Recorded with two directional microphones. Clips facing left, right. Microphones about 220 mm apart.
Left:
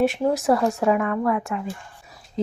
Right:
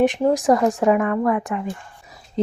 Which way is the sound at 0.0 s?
15° right (ahead or behind).